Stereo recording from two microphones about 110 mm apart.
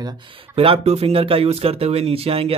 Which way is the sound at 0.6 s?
60° right (ahead or behind).